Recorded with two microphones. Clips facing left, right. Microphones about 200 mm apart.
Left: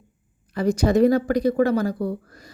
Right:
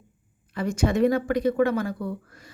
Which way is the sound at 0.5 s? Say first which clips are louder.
Left 5 dB; 35° left (ahead or behind).